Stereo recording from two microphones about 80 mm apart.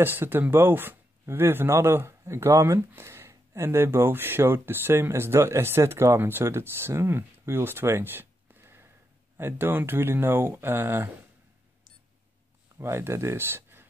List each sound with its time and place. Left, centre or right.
0.0 s speech: right
12.7 s speech: right